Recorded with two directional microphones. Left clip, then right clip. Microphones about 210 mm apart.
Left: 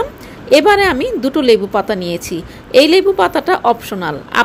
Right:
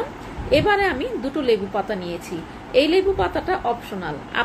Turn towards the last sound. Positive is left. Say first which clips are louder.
# left 10 dB
turn(degrees=55)  # may be behind; listen again after turning